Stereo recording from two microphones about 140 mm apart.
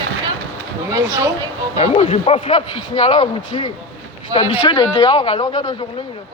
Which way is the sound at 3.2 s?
30° left (ahead or behind).